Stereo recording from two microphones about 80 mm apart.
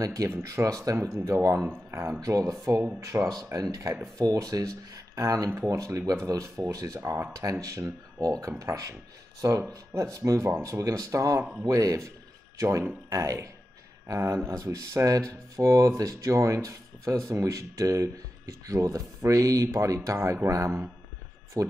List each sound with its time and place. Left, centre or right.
0.0 s speech: right
2.2 s speech: right
4.0 s speech: right